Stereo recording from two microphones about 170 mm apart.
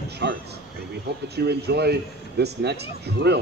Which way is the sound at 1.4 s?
75° right (ahead or behind).